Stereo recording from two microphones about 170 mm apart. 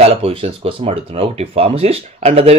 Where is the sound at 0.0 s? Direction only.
35° right (ahead or behind).